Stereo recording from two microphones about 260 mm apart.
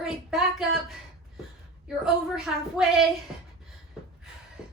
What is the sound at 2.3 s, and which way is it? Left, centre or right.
Speech, centre.